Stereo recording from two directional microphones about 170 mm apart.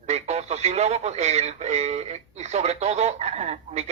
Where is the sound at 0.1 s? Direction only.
40° right (ahead or behind).